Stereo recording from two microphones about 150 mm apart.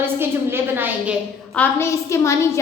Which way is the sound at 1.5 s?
15° left (ahead or behind).